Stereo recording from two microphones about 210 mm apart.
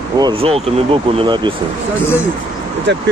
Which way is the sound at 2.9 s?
55° right (ahead or behind).